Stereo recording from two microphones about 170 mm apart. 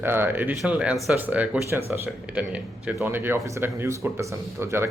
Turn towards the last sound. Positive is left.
turn(degrees=-15)  # may be behind; listen again after turning